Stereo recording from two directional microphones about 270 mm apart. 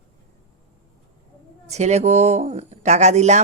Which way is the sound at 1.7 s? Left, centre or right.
Right.